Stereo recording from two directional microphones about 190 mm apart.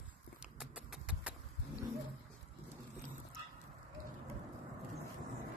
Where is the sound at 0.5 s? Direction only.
5° right (ahead or behind).